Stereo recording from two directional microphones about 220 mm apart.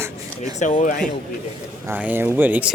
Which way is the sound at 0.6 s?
35° left (ahead or behind).